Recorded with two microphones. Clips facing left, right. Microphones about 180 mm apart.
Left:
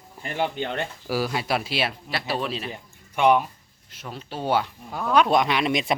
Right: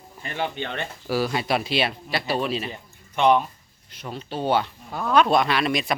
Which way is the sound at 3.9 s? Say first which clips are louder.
Right 3 dB; 5° left (ahead or behind).